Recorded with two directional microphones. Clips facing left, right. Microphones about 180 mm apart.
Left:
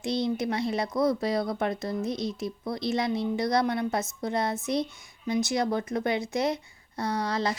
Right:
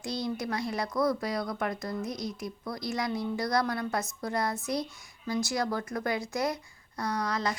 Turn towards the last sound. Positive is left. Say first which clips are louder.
# left 3 dB
turn(degrees=30)  # may be behind; listen again after turning